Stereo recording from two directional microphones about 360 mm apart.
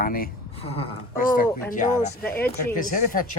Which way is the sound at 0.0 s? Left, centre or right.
Left.